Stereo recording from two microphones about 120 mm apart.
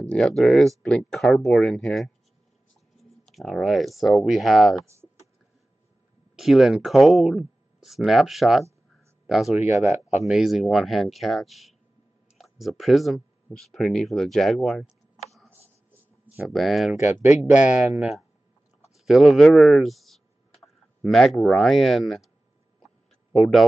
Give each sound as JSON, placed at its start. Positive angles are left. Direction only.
{"t": 0.1, "sound": "speech", "side_deg": 5}
{"t": 6.3, "sound": "speech", "side_deg": 0}
{"t": 9.7, "sound": "speech", "side_deg": 75}
{"t": 10.2, "sound": "speech", "side_deg": -5}
{"t": 23.3, "sound": "speech", "side_deg": 0}